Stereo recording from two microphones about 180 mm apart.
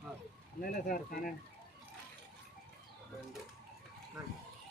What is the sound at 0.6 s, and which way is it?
Speech, 55° left (ahead or behind).